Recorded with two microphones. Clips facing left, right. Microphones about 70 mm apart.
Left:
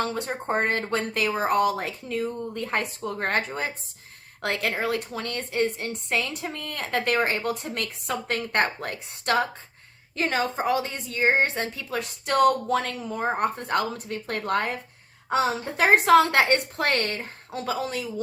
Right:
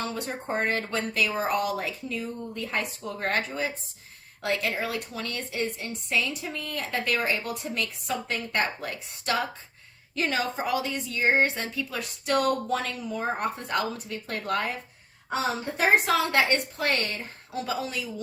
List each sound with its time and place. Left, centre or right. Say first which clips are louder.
0.0 s a woman's voice: left 4 dB; left
12.7 s speech: left 3 dB; left
16.0 s a woman's voice: left 6 dB; left